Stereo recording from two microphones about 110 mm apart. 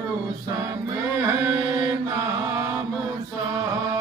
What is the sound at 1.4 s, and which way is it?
Mantra, 25° right (ahead or behind).